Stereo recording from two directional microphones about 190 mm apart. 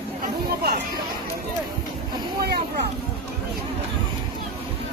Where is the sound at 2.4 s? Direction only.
55° right (ahead or behind).